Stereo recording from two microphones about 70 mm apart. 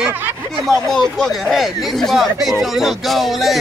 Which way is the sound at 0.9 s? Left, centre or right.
Centre.